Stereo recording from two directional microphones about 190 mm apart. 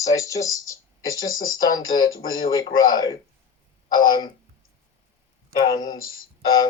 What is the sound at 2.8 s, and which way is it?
Speech, 20° left (ahead or behind).